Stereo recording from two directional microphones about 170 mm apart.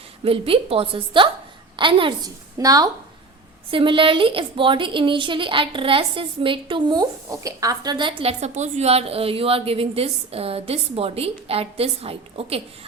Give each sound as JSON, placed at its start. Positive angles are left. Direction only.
{"t": 0.3, "sound": "a woman's voice", "side_deg": -35}